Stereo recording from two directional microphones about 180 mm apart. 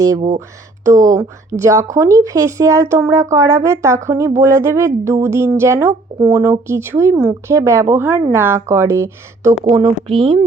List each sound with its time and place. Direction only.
0.9 s speech: 20° right (ahead or behind)
10.2 s speech: 30° right (ahead or behind)